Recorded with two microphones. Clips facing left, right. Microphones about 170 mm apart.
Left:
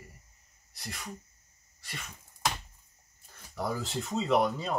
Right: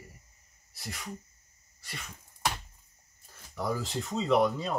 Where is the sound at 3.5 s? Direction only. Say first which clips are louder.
Right 1 dB; centre (ahead or behind).